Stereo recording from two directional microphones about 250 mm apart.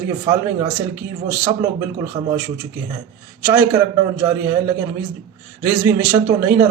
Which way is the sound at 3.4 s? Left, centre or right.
Centre.